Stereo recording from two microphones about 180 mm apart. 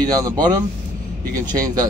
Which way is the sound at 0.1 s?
20° right (ahead or behind).